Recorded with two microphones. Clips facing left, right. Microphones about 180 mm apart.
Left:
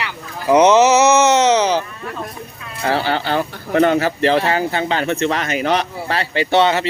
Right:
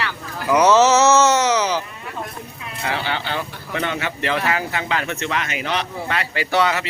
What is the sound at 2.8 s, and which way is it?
Speech, 40° left (ahead or behind).